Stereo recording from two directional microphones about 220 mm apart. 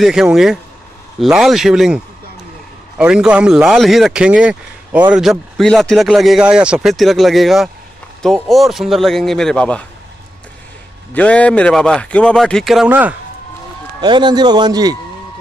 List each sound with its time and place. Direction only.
0.0 s speech: centre (ahead or behind)
3.0 s speech: 5° right (ahead or behind)
11.1 s speech: 5° left (ahead or behind)
14.0 s a man's voice: 20° right (ahead or behind)